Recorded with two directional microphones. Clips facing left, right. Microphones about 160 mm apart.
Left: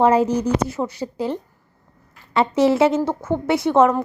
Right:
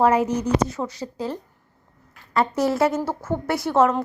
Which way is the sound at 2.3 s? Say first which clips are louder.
Left 4 dB; centre (ahead or behind).